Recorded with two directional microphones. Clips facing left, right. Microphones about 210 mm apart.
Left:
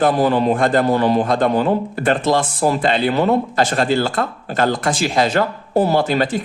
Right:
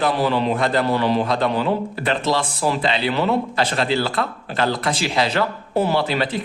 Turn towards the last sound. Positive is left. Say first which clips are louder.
# left 4 dB
turn(degrees=45)  # may be behind; listen again after turning